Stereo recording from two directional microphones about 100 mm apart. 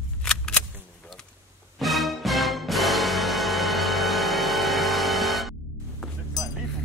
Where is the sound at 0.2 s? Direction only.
10° left (ahead or behind).